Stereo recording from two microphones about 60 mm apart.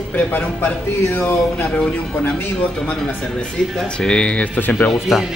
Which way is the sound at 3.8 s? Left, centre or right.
Centre.